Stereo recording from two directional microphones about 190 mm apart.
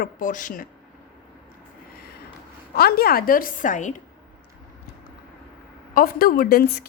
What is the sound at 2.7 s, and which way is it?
A woman's voice, 55° left (ahead or behind).